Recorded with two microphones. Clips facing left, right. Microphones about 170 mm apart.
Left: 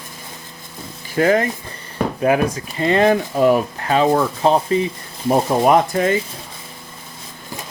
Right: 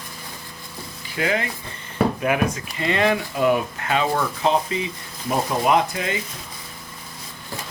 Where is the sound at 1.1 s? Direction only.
45° left (ahead or behind).